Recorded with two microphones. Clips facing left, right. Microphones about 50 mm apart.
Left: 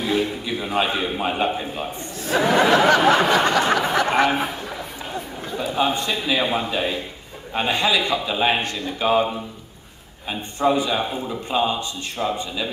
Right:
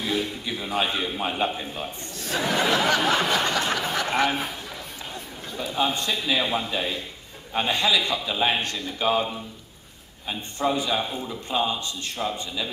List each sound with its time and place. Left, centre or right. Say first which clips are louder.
0.0 s a man's voice: left 5 dB; centre
2.2 s a sound: left 6 dB; centre
5.8 s a man's voice: left 3 dB; left